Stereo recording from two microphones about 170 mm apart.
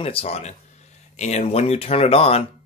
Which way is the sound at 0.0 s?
35° left (ahead or behind).